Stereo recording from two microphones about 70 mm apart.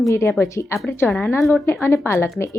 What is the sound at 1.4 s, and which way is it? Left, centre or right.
Speech, left.